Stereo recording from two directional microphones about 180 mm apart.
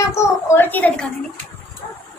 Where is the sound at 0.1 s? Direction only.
15° left (ahead or behind).